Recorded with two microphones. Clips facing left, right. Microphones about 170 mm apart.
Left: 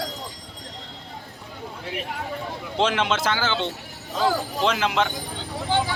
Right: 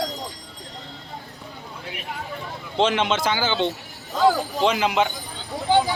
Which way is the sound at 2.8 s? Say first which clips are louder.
Right 2 dB; centre (ahead or behind).